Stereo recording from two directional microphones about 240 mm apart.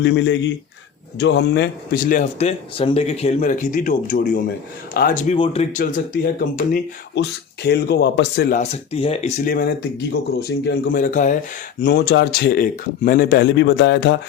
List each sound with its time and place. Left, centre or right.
0.0 s speech: left
5.4 s speech: left
6.4 s speech: left
11.8 s speech: left